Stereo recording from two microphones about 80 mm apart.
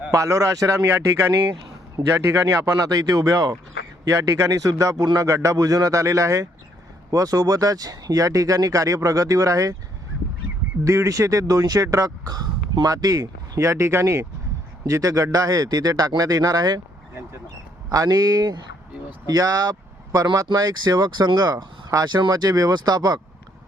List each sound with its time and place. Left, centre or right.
0.1 s speech: right
1.6 s speech: right
10.8 s speech: right
17.8 s speech: right
22.0 s speech: right
22.3 s speech: right